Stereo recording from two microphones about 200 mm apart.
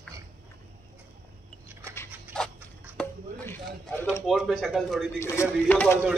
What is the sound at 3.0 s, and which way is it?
Chop, 10° left (ahead or behind).